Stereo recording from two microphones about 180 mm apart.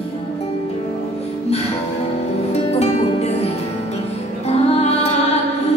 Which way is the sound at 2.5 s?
35° left (ahead or behind).